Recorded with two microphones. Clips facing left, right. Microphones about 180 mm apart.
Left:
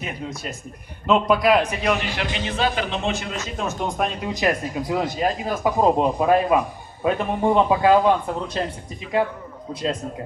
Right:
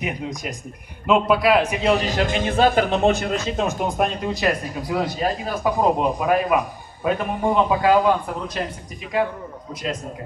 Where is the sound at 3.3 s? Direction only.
30° right (ahead or behind).